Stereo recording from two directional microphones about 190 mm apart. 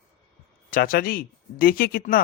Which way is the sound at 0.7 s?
50° left (ahead or behind).